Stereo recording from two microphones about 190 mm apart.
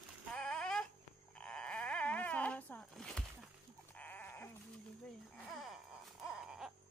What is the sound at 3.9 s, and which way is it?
Sheep, 10° left (ahead or behind).